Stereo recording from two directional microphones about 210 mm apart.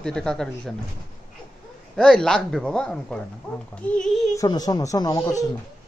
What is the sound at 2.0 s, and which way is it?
Speech, 5° left (ahead or behind).